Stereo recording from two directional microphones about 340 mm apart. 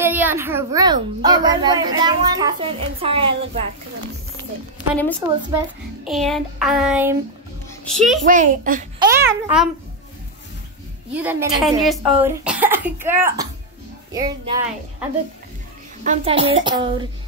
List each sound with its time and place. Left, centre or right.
0.0 s a woman's voice: centre
6.0 s a child's voice: centre
8.3 s a child's voice: right
9.0 s speech: centre
11.1 s a woman's voice: centre
16.1 s a woman's voice: centre